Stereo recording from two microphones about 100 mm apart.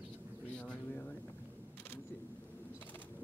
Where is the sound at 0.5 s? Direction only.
10° left (ahead or behind).